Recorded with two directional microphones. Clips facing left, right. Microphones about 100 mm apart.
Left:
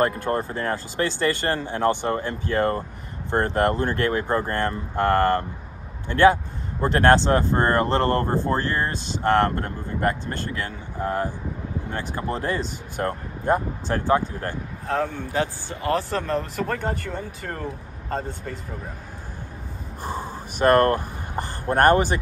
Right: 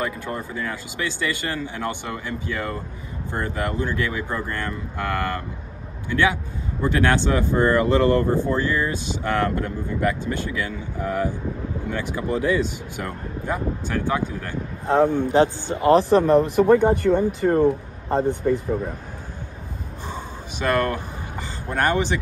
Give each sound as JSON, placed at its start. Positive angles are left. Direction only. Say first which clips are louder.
{"t": 0.0, "sound": "speech", "louder": "left 5 dB", "side_deg": 50}
{"t": 11.9, "sound": "speech", "louder": "right 3 dB", "side_deg": 45}
{"t": 14.9, "sound": "a man's voice", "louder": "right 8 dB", "side_deg": -20}
{"t": 20.0, "sound": "gasp", "louder": "left 4 dB", "side_deg": 45}